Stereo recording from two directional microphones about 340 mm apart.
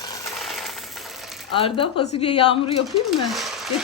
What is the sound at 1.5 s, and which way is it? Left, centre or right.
A woman's voice, centre.